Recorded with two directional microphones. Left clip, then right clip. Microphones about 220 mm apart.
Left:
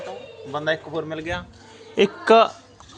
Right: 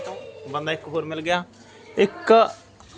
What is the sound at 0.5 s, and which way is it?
Speech, 10° left (ahead or behind).